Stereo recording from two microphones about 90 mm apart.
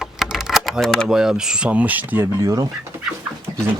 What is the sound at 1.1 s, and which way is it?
Speech, 5° right (ahead or behind).